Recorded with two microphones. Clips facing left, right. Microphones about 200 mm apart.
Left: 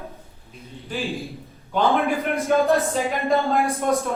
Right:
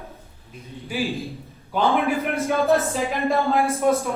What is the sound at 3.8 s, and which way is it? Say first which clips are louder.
Speech: right 3 dB; 5° right (ahead or behind).